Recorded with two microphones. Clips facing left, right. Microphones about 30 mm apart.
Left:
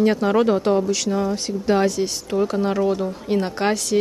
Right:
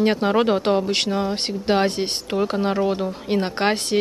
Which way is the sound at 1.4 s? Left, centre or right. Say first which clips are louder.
Left 1 dB; right.